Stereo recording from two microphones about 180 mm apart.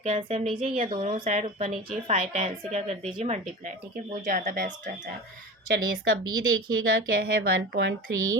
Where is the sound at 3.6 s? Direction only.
55° right (ahead or behind).